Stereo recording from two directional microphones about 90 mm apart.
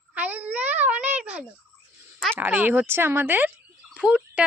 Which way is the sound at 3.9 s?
10° right (ahead or behind).